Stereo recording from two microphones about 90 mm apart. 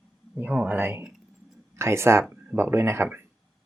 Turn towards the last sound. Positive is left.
turn(degrees=-25)  # may be behind; listen again after turning